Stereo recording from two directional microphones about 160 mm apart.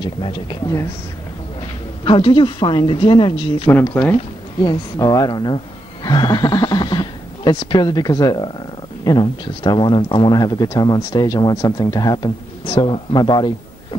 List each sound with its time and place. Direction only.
0.0 s speech: 35° left (ahead or behind)
2.0 s speech: 35° left (ahead or behind)
3.8 s speech: 10° left (ahead or behind)
4.1 s speech: 30° left (ahead or behind)